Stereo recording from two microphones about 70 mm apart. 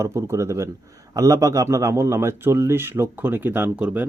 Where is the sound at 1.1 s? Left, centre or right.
Right.